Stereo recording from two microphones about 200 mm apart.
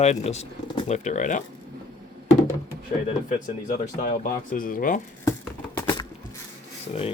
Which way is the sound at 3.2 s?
40° left (ahead or behind).